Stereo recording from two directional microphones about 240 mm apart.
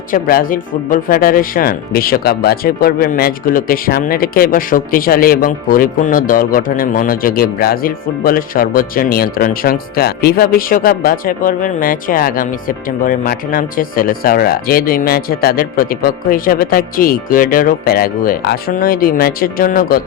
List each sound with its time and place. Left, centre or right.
0.1 s speech: left